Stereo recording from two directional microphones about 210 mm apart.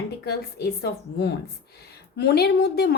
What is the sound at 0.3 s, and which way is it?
A woman's voice, 50° left (ahead or behind).